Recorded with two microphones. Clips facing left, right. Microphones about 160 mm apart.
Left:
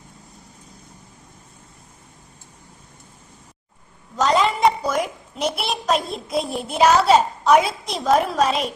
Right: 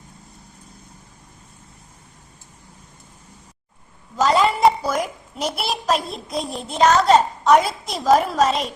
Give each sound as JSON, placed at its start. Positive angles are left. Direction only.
{"t": 4.2, "sound": "a child's voice", "side_deg": 0}